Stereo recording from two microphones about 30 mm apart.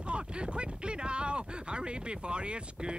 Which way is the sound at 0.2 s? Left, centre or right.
Right.